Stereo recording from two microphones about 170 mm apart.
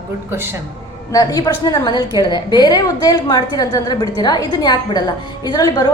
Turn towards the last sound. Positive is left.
turn(degrees=20)  # may be behind; listen again after turning